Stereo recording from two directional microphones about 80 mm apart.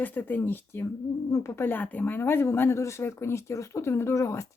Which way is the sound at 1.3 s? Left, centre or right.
Left.